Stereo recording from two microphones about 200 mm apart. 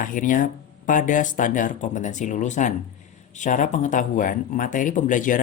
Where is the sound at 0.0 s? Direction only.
40° left (ahead or behind).